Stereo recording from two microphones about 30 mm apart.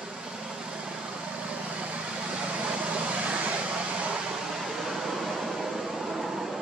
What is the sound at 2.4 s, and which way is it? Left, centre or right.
Vehicle, right.